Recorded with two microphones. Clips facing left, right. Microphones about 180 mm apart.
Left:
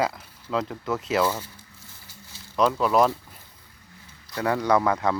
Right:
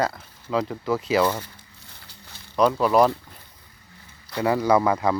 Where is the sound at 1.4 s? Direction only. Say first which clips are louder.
Even; 65° right (ahead or behind).